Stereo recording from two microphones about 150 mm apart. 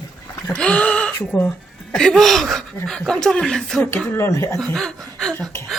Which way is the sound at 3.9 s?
15° left (ahead or behind).